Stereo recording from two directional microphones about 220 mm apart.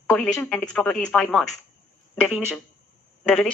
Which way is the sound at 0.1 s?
5° left (ahead or behind).